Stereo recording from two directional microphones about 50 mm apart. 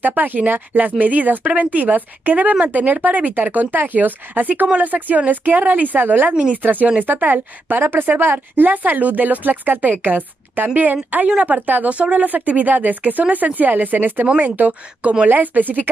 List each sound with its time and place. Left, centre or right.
0.0 s speech: right
14.2 s speech: right